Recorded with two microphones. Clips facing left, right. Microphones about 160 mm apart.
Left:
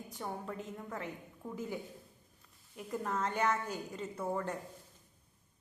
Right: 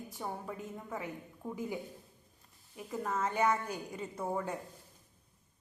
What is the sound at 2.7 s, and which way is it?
A woman's voice, 5° right (ahead or behind).